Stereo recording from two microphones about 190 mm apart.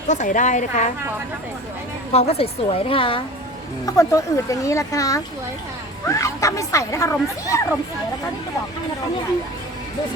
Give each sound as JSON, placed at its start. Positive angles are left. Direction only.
{"t": 0.1, "sound": "a woman's voice", "side_deg": 40}
{"t": 2.1, "sound": "a woman's voice", "side_deg": 30}
{"t": 3.8, "sound": "speech", "side_deg": 15}